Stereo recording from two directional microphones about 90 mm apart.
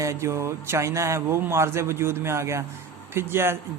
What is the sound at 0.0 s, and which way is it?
A man's voice, 35° right (ahead or behind).